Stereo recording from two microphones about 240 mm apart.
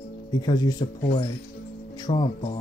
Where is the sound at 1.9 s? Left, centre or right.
Centre.